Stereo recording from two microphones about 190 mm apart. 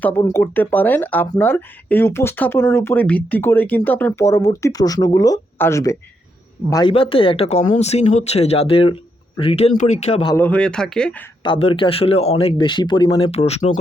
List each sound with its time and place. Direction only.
0.0 s speech: 10° left (ahead or behind); by 10.3 s 30° left (ahead or behind)
10.3 s speech: 10° left (ahead or behind)
11.4 s speech: 25° left (ahead or behind)